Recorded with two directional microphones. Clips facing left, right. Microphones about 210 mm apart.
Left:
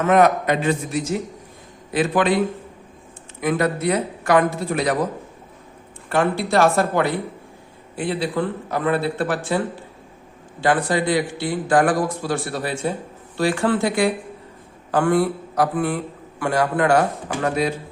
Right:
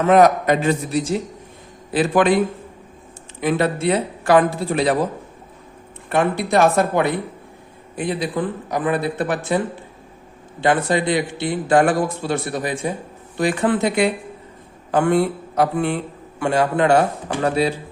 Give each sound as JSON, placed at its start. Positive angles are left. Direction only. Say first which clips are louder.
{"t": 0.0, "sound": "a man's voice", "louder": "right 2 dB", "side_deg": -35}
{"t": 3.4, "sound": "a man's voice", "louder": "right 1 dB", "side_deg": -30}
{"t": 6.1, "sound": "a man's voice", "louder": "right 1 dB", "side_deg": -20}